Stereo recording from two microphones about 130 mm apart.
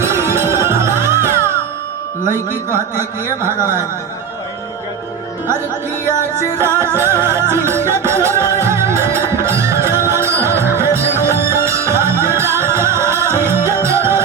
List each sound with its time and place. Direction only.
0.1 s music: 20° right (ahead or behind)
2.5 s speech: 20° right (ahead or behind)
6.1 s music: 20° right (ahead or behind)